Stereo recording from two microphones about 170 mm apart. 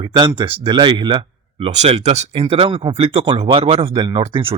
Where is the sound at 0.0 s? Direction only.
30° right (ahead or behind).